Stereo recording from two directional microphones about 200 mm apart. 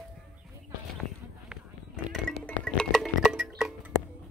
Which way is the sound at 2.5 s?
5° left (ahead or behind).